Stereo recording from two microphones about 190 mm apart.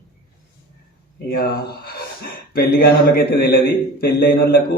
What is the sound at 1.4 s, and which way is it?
A man's voice, 55° left (ahead or behind).